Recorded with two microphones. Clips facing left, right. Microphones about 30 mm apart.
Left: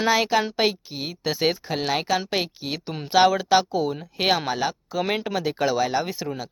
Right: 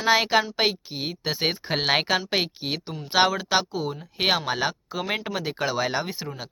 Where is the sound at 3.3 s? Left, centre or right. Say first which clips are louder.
Left 4 dB; centre.